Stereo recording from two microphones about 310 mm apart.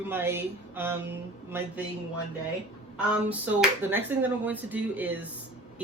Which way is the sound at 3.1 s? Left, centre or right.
Centre.